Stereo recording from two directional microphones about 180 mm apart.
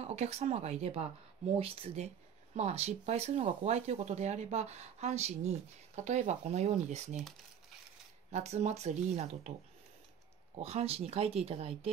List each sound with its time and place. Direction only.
0.0 s speech: 35° right (ahead or behind)
8.3 s speech: 40° right (ahead or behind)
10.5 s speech: 35° right (ahead or behind)